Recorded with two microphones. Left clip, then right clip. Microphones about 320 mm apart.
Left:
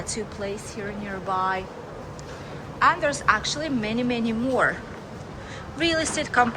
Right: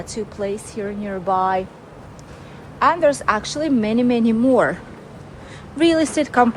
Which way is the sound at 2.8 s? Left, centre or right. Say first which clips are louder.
Right 4 dB; centre.